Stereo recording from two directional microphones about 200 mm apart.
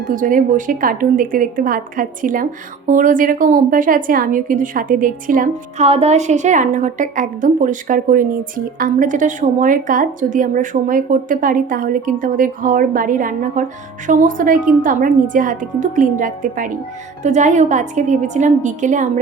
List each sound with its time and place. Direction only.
0.1 s a woman's voice: 40° right (ahead or behind)